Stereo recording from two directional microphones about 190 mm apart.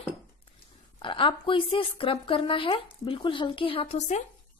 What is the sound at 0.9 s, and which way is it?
A woman's voice, 25° left (ahead or behind).